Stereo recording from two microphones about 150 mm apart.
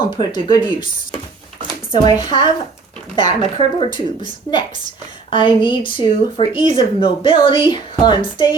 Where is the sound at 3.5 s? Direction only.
35° left (ahead or behind).